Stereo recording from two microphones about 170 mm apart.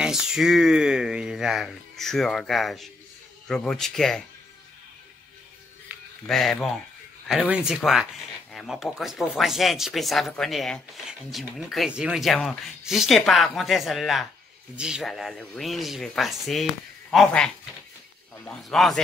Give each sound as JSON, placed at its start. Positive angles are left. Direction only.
{"t": 0.0, "sound": "speech", "side_deg": -5}
{"t": 6.2, "sound": "speech", "side_deg": 0}